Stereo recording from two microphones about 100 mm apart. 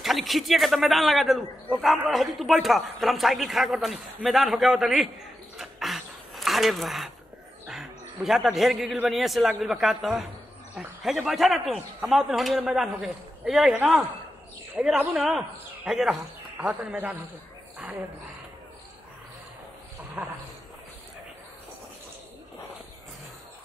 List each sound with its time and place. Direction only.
0.0 s a man's voice: centre (ahead or behind)
5.6 s a sound: centre (ahead or behind)
7.7 s a man's voice: 5° right (ahead or behind)
16.6 s a man's voice: 20° right (ahead or behind)
20.2 s a man's voice: 20° right (ahead or behind)